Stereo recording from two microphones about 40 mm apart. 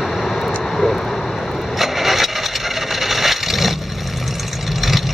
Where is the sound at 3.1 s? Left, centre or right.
Centre.